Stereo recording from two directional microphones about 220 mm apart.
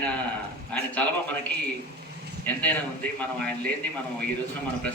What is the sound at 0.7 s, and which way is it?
Speech, 5° left (ahead or behind).